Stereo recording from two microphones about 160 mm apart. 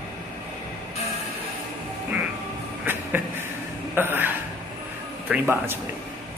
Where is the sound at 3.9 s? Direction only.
15° right (ahead or behind).